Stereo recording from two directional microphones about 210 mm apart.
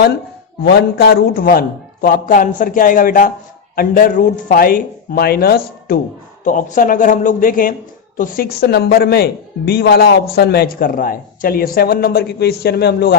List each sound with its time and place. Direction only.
0.6 s a man's voice: 50° left (ahead or behind)